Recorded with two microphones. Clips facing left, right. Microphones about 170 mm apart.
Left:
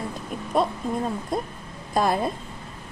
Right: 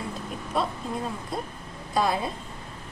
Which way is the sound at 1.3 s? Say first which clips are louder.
Left 5 dB; 50° left (ahead or behind).